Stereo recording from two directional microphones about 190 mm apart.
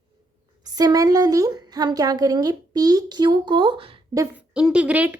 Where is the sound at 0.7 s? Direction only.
20° right (ahead or behind).